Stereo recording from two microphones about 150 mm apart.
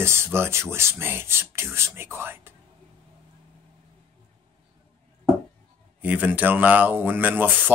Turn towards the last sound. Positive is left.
turn(degrees=-10)  # may be behind; listen again after turning